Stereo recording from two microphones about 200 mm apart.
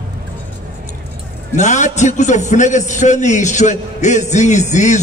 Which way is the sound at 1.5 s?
35° left (ahead or behind).